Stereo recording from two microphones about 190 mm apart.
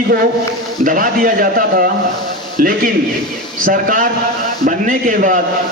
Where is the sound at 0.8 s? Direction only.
45° right (ahead or behind).